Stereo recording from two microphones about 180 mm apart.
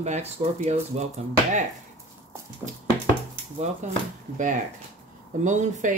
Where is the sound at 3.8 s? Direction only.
40° right (ahead or behind).